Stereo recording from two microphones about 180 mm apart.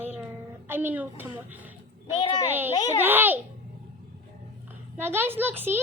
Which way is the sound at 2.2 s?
25° left (ahead or behind).